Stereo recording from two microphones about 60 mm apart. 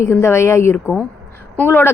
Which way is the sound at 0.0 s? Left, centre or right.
Left.